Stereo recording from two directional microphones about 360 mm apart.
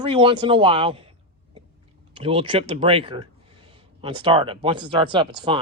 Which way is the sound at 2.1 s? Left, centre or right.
Centre.